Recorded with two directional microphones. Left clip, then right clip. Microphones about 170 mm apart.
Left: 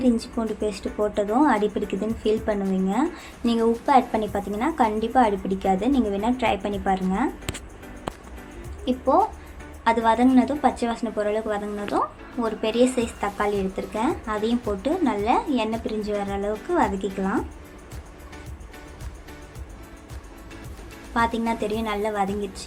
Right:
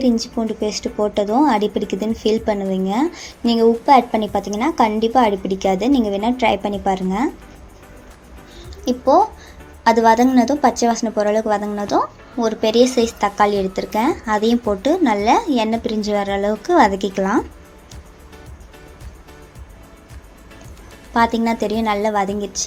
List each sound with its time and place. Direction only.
0.0 s a woman's voice: 30° right (ahead or behind)
8.8 s a woman's voice: 40° right (ahead or behind)
21.1 s a woman's voice: 40° right (ahead or behind)